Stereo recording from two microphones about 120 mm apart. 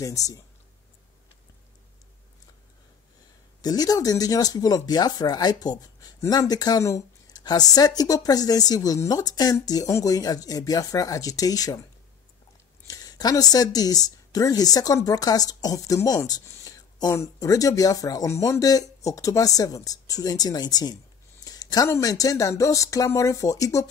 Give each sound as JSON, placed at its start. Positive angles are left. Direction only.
{"t": 0.0, "sound": "speech", "side_deg": 30}
{"t": 3.6, "sound": "speech", "side_deg": 30}
{"t": 12.8, "sound": "speech", "side_deg": 30}